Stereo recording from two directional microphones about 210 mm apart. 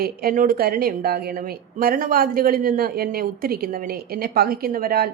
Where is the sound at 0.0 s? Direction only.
45° right (ahead or behind).